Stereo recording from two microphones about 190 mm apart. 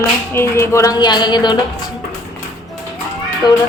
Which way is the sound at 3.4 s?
20° left (ahead or behind).